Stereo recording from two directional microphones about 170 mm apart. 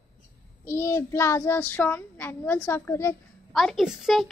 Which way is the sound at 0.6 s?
15° left (ahead or behind).